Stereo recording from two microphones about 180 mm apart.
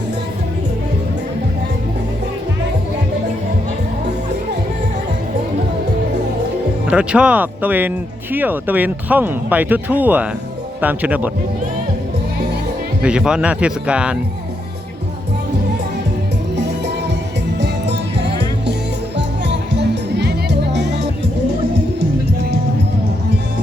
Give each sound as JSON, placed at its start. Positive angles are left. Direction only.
{"t": 6.8, "sound": "speech", "side_deg": -5}
{"t": 13.0, "sound": "speech", "side_deg": -5}
{"t": 17.6, "sound": "music", "side_deg": -70}